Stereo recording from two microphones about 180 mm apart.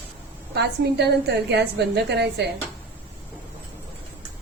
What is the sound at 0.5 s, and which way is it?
A woman's voice, 70° right (ahead or behind).